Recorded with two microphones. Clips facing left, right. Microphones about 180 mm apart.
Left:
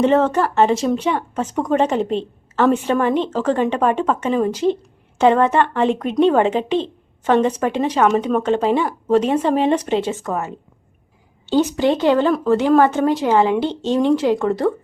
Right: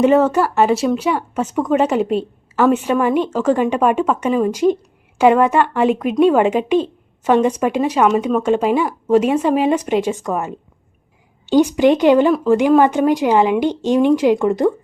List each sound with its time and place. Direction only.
0.0 s speech: 10° right (ahead or behind)